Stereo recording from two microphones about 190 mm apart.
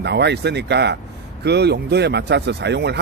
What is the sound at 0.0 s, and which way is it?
A man's voice, 60° right (ahead or behind).